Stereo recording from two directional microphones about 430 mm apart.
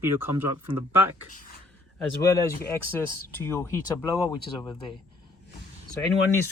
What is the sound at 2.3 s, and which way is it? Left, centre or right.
Speech, centre.